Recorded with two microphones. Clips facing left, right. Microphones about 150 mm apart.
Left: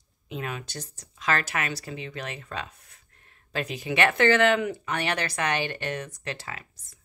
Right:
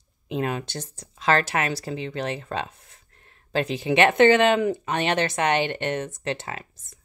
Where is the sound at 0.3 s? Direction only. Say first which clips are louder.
Right 7 dB; 30° right (ahead or behind).